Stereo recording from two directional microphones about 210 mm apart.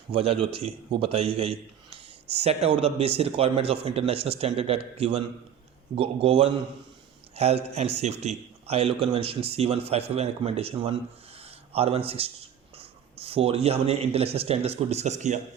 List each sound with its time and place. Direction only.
0.1 s a man's voice: 25° right (ahead or behind)
11.3 s a sound: 30° right (ahead or behind)
12.7 s speech: 30° right (ahead or behind)